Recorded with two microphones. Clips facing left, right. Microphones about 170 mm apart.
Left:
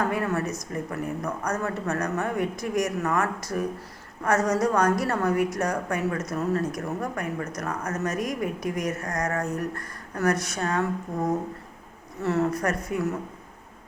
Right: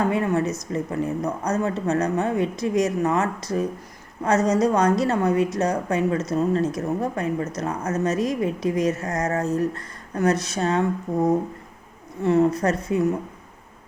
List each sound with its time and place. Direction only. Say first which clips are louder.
0.0 s speech: right 4 dB; 20° right (ahead or behind)